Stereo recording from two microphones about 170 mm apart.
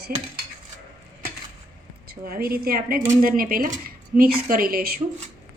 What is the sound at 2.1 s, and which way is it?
Speech, 60° right (ahead or behind).